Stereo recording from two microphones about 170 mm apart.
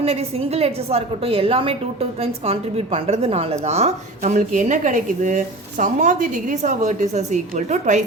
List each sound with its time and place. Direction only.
0.0 s a woman's voice: 35° right (ahead or behind)